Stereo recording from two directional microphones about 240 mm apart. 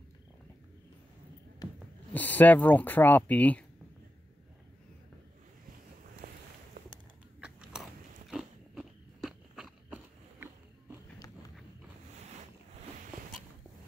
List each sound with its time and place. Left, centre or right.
2.1 s speech: centre
6.2 s boat: right
7.3 s biting: centre